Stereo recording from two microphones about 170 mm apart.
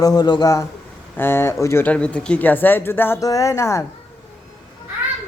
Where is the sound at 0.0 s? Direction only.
25° left (ahead or behind).